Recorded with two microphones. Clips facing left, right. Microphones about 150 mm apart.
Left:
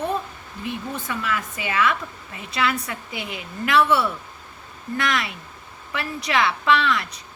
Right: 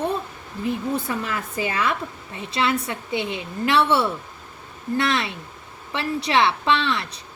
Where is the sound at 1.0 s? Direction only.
35° right (ahead or behind).